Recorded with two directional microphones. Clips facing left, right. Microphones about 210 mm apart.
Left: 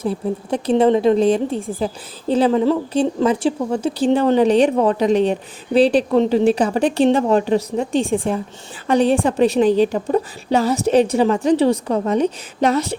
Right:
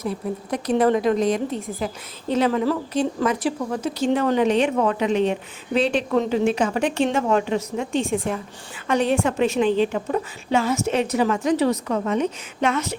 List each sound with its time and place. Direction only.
0.0 s a woman's voice: 30° left (ahead or behind)